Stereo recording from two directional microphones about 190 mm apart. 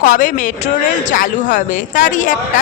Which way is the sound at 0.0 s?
45° left (ahead or behind).